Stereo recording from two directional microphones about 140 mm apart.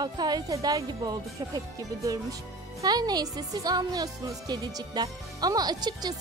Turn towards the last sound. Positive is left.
turn(degrees=-30)  # may be behind; listen again after turning